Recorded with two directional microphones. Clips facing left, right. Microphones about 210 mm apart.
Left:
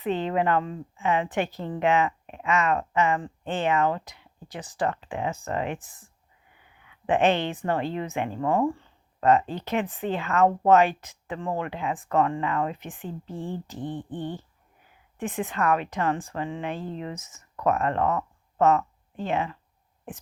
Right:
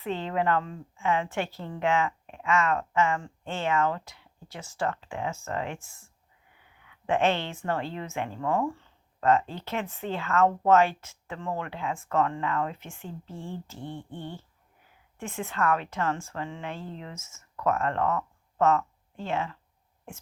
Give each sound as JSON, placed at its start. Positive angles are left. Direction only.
{"t": 0.0, "sound": "speech", "side_deg": 15}